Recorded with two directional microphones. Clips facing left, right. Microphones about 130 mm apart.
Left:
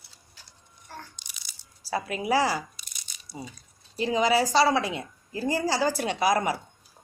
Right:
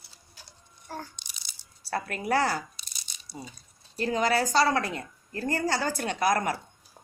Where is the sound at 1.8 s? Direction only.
5° left (ahead or behind).